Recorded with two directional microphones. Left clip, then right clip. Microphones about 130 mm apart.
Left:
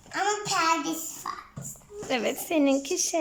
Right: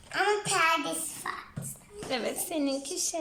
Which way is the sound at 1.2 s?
15° left (ahead or behind).